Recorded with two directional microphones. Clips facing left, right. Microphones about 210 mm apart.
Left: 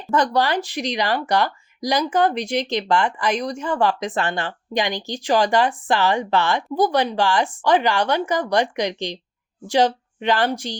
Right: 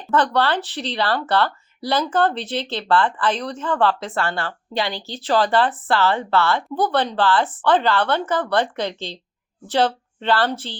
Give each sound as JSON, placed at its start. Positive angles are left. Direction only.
{"t": 0.1, "sound": "speech", "side_deg": 10}